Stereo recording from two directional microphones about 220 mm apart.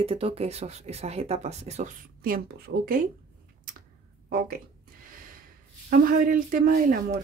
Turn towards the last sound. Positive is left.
turn(degrees=-40)  # may be behind; listen again after turning